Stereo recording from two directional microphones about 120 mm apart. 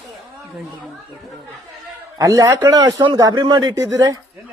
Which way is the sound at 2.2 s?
30° right (ahead or behind).